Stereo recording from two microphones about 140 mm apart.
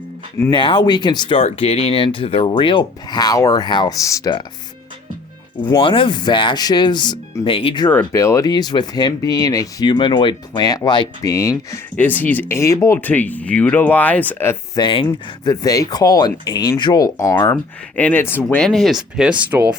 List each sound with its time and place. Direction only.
0.5 s speech: 35° left (ahead or behind)
1.4 s speech: 50° left (ahead or behind); by 4.4 s 30° left (ahead or behind)
5.8 s speech: 40° left (ahead or behind)
7.9 s speech: 20° left (ahead or behind)
14.8 s speech: 35° left (ahead or behind); by 18.4 s 15° left (ahead or behind)
18.4 s speech: 5° left (ahead or behind)